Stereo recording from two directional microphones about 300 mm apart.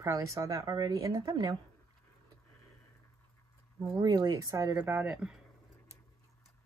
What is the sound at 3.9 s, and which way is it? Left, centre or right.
A woman's voice, centre.